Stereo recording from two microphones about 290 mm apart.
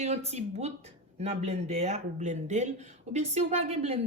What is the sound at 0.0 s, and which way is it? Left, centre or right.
A woman's voice, right.